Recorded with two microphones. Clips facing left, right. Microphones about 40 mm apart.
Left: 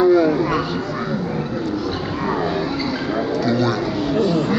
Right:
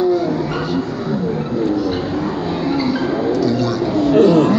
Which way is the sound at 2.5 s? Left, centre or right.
Centre.